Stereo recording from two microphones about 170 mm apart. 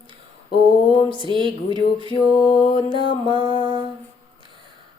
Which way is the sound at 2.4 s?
50° left (ahead or behind).